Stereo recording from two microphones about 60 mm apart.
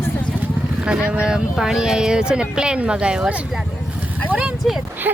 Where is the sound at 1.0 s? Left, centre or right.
Centre.